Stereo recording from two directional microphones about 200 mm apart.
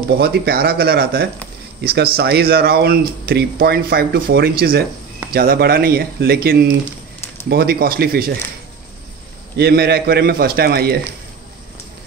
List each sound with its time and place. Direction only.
0.2 s speech: 50° right (ahead or behind)
9.6 s speech: 55° right (ahead or behind)